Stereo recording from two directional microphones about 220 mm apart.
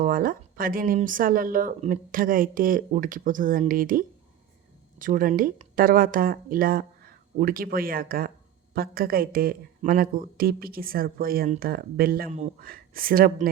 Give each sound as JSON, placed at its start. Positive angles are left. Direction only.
{"t": 0.0, "sound": "speech", "side_deg": -40}